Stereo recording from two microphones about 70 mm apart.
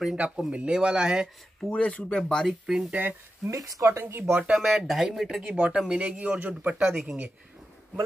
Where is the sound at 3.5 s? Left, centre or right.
Right.